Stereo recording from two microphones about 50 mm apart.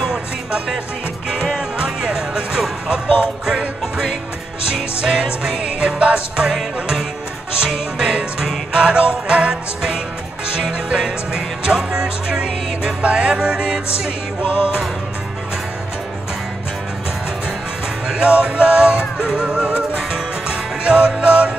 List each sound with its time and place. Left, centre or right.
0.0 s music: centre
7.6 s music: centre
18.0 s music: right